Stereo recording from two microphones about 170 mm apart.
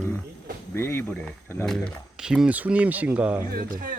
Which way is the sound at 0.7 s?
15° left (ahead or behind).